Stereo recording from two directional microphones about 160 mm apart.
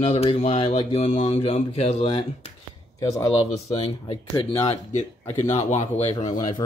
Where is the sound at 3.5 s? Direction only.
40° left (ahead or behind).